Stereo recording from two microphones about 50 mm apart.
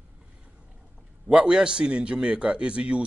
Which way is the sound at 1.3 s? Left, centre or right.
Right.